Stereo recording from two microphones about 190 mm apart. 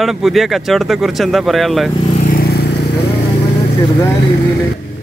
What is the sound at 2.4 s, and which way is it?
Vehicle, 55° left (ahead or behind).